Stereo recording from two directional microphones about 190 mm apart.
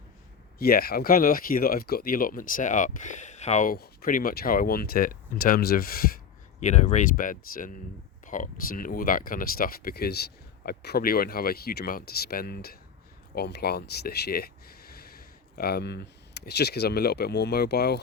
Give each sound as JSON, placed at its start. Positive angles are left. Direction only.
{"t": 0.6, "sound": "speech", "side_deg": 55}
{"t": 6.6, "sound": "speech", "side_deg": 40}